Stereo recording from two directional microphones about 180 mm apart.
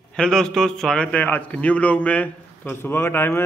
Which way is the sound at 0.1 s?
5° left (ahead or behind).